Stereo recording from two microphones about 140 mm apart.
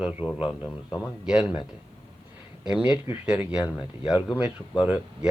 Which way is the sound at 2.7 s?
5° right (ahead or behind).